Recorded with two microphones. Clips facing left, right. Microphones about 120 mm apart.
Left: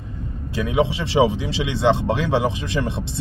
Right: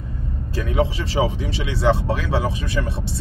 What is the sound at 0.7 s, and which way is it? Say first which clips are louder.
Speech: left 1 dB; 15° left (ahead or behind).